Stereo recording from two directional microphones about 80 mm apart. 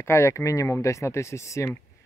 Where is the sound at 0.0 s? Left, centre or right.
Left.